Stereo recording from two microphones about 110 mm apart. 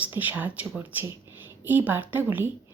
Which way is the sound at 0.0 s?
15° right (ahead or behind).